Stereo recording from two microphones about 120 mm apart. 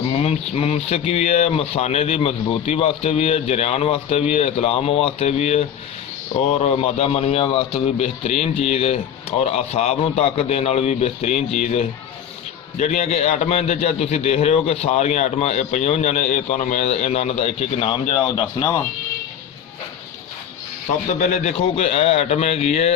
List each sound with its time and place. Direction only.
0.2 s a man's voice: 60° left (ahead or behind); by 18.4 s 40° left (ahead or behind)
21.1 s a man's voice: 80° left; by 23.0 s 65° left (ahead or behind)